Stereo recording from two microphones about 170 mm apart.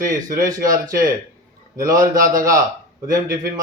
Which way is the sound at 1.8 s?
20° right (ahead or behind).